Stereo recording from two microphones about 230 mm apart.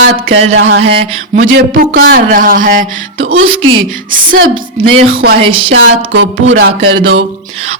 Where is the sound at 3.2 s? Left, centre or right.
Right.